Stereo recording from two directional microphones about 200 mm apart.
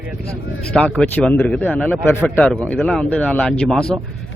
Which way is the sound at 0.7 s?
5° left (ahead or behind).